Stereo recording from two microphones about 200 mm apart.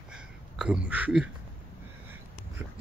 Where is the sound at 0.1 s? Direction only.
5° right (ahead or behind).